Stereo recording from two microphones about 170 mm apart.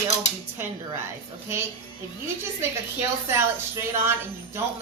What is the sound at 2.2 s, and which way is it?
A woman's voice, 15° right (ahead or behind).